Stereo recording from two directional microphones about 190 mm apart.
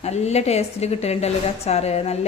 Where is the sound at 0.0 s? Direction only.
35° left (ahead or behind).